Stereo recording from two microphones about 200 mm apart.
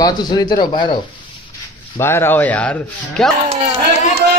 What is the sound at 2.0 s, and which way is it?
Speech, 10° left (ahead or behind).